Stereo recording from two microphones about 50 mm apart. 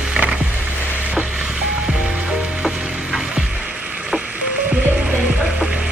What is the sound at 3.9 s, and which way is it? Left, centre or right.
Frog, right.